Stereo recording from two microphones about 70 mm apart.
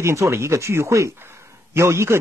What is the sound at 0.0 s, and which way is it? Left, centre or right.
Speech, right.